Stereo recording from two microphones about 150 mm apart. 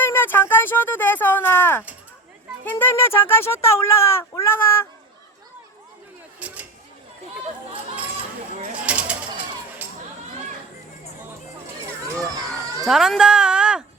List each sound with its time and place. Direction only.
0.0 s speech: 15° left (ahead or behind)
6.4 s a sound: 10° right (ahead or behind)
8.9 s bird: 10° right (ahead or behind)
12.8 s speech: 5° right (ahead or behind)